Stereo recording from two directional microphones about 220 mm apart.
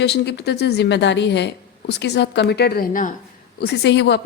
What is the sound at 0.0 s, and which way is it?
A woman's voice, 50° left (ahead or behind).